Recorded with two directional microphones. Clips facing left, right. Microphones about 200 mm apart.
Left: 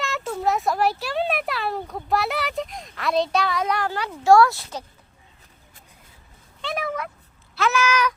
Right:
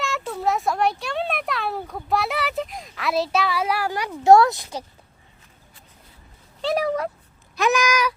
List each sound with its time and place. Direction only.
0.0 s speech: centre (ahead or behind)
6.6 s speech: 35° right (ahead or behind)
7.5 s a sound: 15° right (ahead or behind)